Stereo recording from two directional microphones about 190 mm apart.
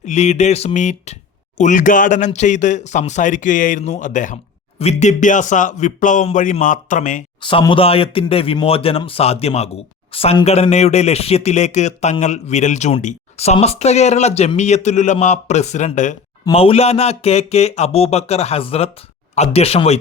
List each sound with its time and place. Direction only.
0.0 s speech: 35° left (ahead or behind)
7.4 s speech: 25° left (ahead or behind)